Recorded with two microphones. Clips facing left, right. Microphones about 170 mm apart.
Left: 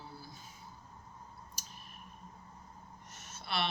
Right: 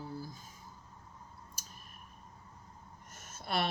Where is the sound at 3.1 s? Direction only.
50° right (ahead or behind).